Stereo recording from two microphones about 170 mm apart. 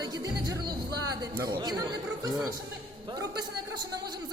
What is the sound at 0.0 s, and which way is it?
Music, 20° right (ahead or behind).